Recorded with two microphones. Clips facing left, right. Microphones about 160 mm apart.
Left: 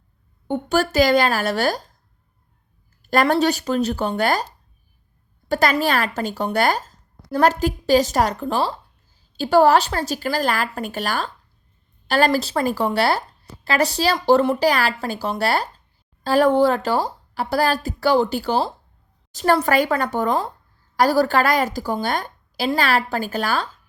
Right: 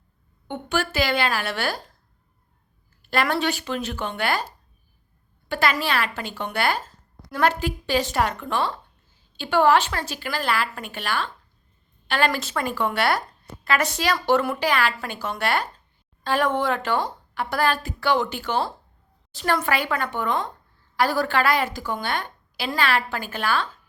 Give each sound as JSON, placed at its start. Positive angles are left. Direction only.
{"t": 0.4, "sound": "a woman's voice", "side_deg": 40}
{"t": 3.0, "sound": "a woman's voice", "side_deg": 40}
{"t": 5.5, "sound": "a woman's voice", "side_deg": 40}